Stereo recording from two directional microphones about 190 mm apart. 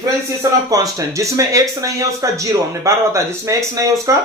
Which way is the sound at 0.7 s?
20° right (ahead or behind).